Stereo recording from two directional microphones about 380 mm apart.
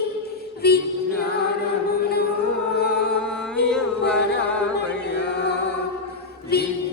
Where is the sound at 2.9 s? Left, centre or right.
Centre.